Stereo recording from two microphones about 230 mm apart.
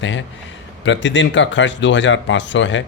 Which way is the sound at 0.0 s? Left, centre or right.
Left.